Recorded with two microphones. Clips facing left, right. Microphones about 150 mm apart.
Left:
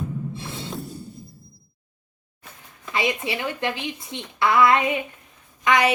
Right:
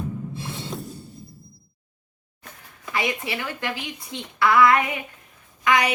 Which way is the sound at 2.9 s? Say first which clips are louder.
Left 2 dB; 20° left (ahead or behind).